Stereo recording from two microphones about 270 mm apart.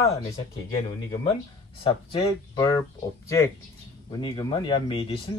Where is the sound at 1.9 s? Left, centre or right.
Centre.